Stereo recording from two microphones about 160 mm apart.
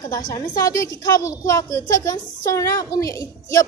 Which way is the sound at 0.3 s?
20° left (ahead or behind).